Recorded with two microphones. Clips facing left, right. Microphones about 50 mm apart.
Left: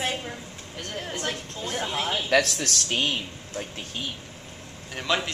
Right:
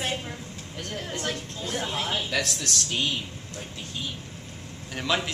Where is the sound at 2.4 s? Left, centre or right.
Left.